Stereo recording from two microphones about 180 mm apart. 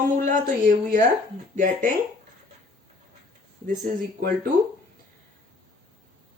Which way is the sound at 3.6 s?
45° right (ahead or behind).